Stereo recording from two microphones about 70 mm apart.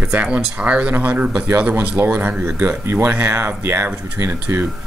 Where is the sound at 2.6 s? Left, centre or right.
Right.